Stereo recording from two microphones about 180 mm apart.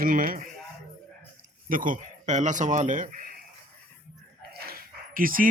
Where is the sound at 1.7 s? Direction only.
50° right (ahead or behind).